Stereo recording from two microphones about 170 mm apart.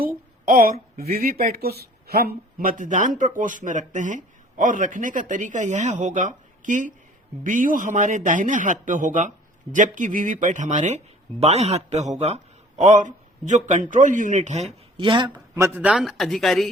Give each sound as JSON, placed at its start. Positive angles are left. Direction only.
{"t": 0.0, "sound": "a woman's voice", "side_deg": -55}
{"t": 14.7, "sound": "speech", "side_deg": -30}